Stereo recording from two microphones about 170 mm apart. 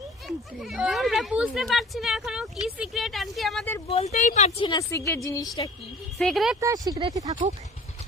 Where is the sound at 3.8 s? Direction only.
40° left (ahead or behind).